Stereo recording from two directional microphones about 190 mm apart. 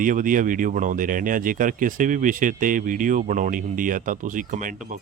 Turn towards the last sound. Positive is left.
turn(degrees=-45)  # may be behind; listen again after turning